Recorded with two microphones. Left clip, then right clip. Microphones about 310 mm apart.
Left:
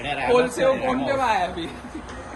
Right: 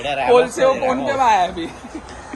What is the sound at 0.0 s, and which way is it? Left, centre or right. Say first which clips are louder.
A man's voice: right 5 dB; centre.